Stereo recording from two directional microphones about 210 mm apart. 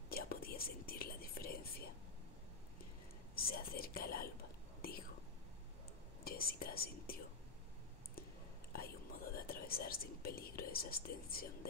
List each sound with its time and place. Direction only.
0.1 s whispering: 45° left (ahead or behind)
3.3 s whispering: 45° left (ahead or behind)
6.2 s whispering: 45° left (ahead or behind)
8.7 s whispering: 45° left (ahead or behind)